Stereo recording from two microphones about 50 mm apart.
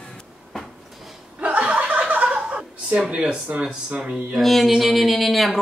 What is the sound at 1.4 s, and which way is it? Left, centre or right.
Chuckle, right.